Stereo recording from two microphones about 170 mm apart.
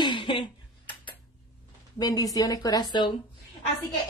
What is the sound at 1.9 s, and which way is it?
A woman's voice, 20° left (ahead or behind).